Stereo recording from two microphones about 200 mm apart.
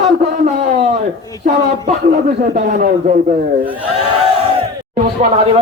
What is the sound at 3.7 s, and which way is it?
Speech, 5° right (ahead or behind).